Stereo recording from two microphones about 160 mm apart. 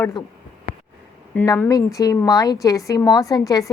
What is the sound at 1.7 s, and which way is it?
A woman's voice, 20° left (ahead or behind).